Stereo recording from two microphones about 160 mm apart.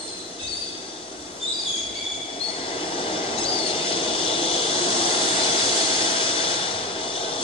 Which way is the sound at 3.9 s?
35° left (ahead or behind).